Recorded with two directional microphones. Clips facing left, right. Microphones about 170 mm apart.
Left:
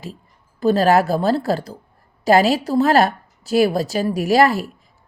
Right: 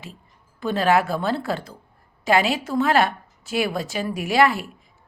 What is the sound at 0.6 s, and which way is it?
A woman's voice, 40° left (ahead or behind).